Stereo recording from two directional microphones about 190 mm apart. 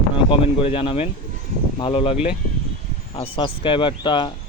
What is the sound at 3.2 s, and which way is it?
Speech, 25° left (ahead or behind).